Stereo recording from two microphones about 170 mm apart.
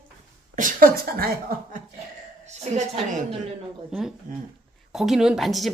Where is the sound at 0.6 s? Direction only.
55° right (ahead or behind).